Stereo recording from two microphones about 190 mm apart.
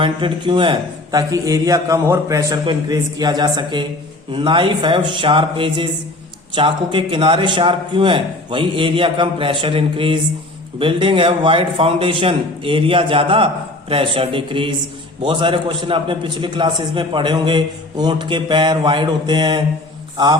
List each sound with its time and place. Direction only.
0.0 s a man's voice: 25° right (ahead or behind)